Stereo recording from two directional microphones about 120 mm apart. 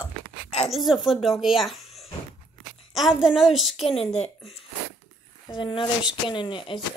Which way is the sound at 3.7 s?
60° left (ahead or behind).